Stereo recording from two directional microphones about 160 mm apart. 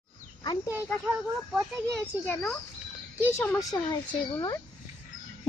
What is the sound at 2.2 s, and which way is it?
A woman's voice, 10° left (ahead or behind).